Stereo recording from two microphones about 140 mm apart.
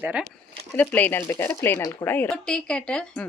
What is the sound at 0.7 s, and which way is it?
A woman's voice, 10° left (ahead or behind).